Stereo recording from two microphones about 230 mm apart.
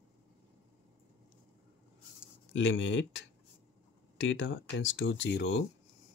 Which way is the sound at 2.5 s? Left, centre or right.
Left.